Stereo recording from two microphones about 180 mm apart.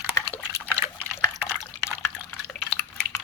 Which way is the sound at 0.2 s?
15° left (ahead or behind).